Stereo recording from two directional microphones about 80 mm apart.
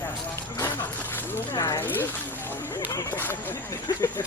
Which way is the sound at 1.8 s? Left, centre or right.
Left.